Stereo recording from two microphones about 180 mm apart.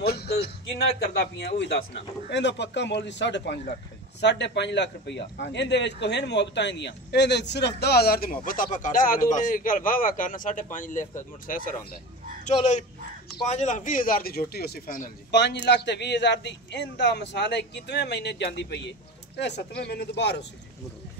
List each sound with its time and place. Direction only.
0.0 s a man's voice: 60° left (ahead or behind)
15.3 s a man's voice: 75° left (ahead or behind)